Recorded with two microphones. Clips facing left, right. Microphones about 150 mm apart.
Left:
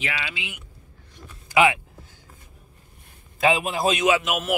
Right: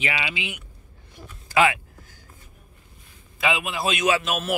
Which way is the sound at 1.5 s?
20° left (ahead or behind).